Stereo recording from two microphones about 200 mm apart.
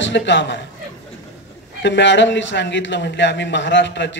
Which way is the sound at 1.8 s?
65° left (ahead or behind).